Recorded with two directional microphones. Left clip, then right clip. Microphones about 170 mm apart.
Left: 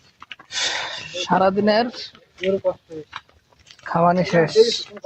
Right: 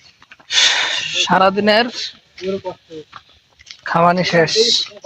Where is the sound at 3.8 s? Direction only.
35° right (ahead or behind).